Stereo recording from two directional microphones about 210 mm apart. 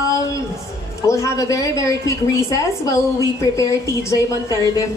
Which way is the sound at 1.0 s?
15° left (ahead or behind).